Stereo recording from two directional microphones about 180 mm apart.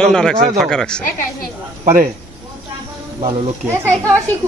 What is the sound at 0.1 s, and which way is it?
Speech, 5° left (ahead or behind).